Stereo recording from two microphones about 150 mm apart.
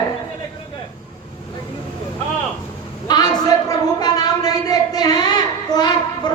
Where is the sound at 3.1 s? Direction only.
25° left (ahead or behind).